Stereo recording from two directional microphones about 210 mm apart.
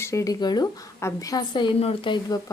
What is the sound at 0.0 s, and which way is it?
A woman's voice, 15° left (ahead or behind).